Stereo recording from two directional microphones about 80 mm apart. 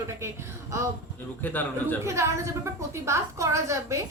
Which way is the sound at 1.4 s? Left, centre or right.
Left.